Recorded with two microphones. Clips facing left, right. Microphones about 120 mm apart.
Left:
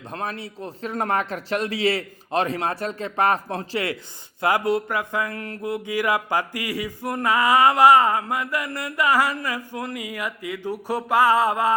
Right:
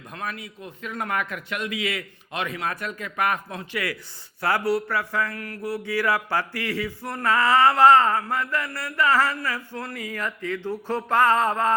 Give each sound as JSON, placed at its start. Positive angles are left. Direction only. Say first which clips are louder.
{"t": 0.1, "sound": "a man's voice", "louder": "left 3 dB", "side_deg": 30}
{"t": 4.4, "sound": "speech", "louder": "left 2 dB", "side_deg": 15}